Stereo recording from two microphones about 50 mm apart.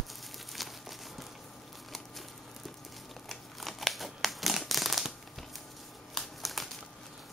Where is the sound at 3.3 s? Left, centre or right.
Centre.